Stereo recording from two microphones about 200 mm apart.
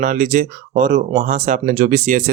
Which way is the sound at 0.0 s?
40° right (ahead or behind).